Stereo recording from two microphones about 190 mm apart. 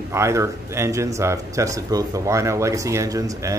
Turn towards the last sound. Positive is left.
turn(degrees=-20)  # may be behind; listen again after turning